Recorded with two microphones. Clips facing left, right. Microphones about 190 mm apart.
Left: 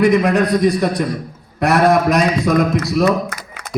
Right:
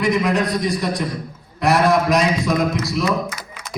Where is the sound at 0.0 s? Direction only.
60° left (ahead or behind).